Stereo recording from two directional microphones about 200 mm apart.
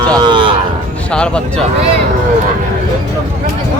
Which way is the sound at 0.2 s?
25° right (ahead or behind).